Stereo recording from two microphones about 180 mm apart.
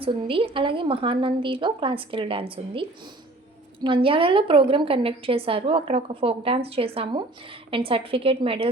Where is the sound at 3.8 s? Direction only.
30° right (ahead or behind).